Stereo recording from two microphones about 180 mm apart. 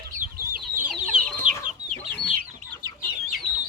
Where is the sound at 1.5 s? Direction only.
45° right (ahead or behind).